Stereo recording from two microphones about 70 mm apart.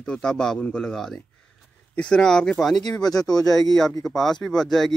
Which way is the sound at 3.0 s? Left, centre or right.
Left.